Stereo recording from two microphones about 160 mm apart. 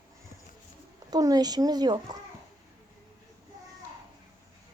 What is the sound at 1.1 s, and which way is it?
Speech, 25° right (ahead or behind).